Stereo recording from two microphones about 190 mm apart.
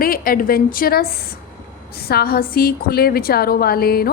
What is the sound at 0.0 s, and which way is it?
A woman's voice, 50° left (ahead or behind).